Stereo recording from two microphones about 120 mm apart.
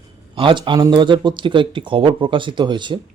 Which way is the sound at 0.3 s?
45° right (ahead or behind).